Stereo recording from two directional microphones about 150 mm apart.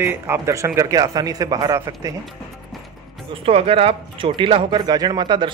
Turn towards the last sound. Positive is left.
turn(degrees=-30)  # may be behind; listen again after turning